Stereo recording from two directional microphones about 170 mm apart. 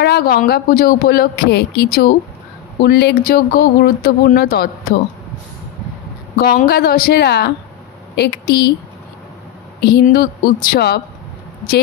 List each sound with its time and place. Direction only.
0.0 s a man's voice: 65° left (ahead or behind)
6.3 s a man's voice: 60° left (ahead or behind)
9.8 s a woman's voice: 75° left (ahead or behind)
10.0 s a man's voice: 60° left (ahead or behind)